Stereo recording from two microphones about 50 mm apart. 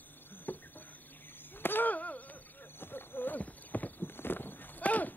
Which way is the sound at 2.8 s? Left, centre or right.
Left.